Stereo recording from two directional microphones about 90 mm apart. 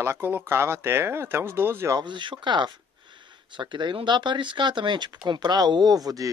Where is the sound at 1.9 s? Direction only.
60° right (ahead or behind).